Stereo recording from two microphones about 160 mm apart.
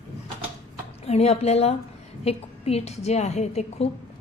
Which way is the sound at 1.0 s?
40° left (ahead or behind).